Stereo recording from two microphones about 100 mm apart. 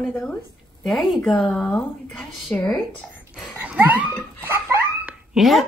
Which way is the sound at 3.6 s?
15° right (ahead or behind).